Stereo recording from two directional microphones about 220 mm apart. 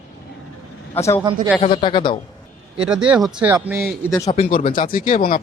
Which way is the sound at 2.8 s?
5° right (ahead or behind).